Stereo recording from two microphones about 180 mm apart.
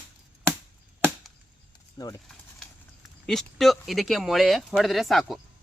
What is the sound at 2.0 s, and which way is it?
Speech, 25° left (ahead or behind).